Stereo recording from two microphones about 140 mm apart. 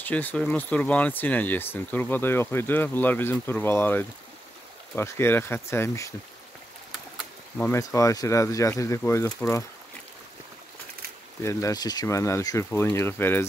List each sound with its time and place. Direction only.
0.0 s speech: 10° left (ahead or behind)
7.5 s speech: 15° left (ahead or behind)
11.4 s speech: 25° left (ahead or behind)